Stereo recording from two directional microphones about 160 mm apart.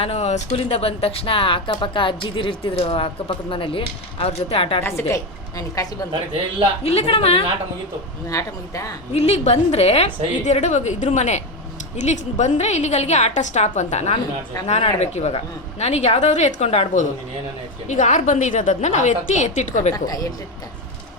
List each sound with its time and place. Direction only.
0.0 s speech: 40° left (ahead or behind)
4.8 s a woman's voice: 15° left (ahead or behind)
6.8 s speech: 40° left (ahead or behind)
8.3 s a woman's voice: 20° left (ahead or behind)
9.1 s a woman's voice: 40° left (ahead or behind)
20.1 s a woman's voice: 20° left (ahead or behind)